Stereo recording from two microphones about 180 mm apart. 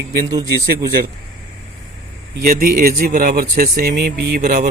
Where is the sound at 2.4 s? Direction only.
50° right (ahead or behind).